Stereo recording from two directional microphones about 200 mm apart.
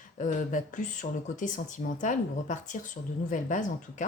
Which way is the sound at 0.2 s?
40° left (ahead or behind).